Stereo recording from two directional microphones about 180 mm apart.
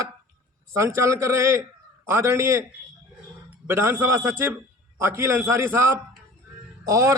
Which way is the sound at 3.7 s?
15° right (ahead or behind).